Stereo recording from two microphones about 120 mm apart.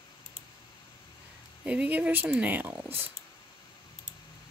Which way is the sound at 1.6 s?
10° right (ahead or behind).